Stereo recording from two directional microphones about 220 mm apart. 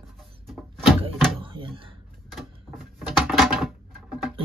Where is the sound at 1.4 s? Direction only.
25° right (ahead or behind).